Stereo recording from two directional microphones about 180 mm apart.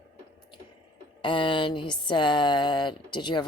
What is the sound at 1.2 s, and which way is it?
Speech, 25° left (ahead or behind).